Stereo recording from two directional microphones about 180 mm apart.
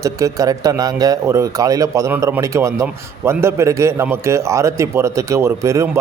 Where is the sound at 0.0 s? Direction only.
20° right (ahead or behind).